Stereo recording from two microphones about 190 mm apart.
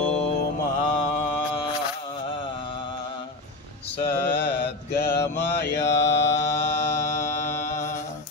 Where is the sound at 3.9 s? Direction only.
60° left (ahead or behind).